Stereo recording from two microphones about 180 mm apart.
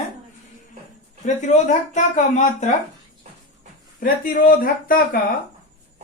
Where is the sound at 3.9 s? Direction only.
50° left (ahead or behind).